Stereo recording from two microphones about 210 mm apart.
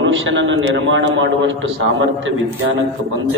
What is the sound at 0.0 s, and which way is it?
A man's voice, 60° right (ahead or behind).